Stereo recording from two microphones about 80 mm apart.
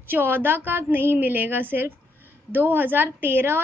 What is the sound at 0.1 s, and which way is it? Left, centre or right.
A woman's voice, right.